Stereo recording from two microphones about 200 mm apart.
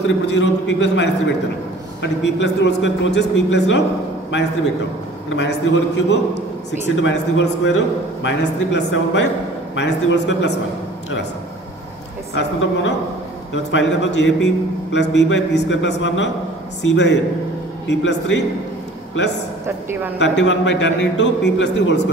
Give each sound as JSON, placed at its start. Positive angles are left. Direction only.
{"t": 0.0, "sound": "a man's voice", "side_deg": 60}
{"t": 5.3, "sound": "a man's voice", "side_deg": 65}
{"t": 12.4, "sound": "a man's voice", "side_deg": 65}
{"t": 20.2, "sound": "a man's voice", "side_deg": 65}